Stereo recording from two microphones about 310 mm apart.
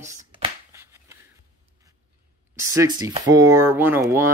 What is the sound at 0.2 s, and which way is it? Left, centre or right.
Shuffling cards, centre.